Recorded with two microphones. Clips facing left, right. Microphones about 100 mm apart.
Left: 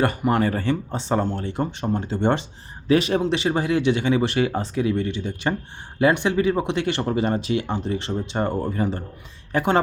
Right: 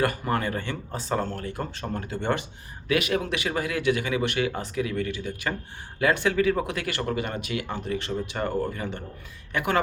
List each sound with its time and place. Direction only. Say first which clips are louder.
0.0 s a woman's voice: left 5 dB; 25° left (ahead or behind)